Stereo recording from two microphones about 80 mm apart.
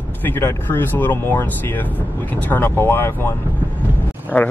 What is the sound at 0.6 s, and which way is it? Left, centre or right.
Speech, left.